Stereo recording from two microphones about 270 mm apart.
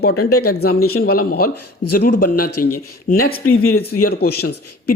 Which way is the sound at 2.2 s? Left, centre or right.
Left.